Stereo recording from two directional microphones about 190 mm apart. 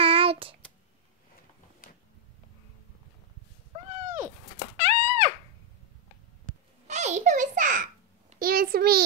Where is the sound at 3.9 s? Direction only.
40° right (ahead or behind).